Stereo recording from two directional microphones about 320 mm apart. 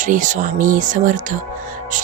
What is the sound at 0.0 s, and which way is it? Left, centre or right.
Speech, right.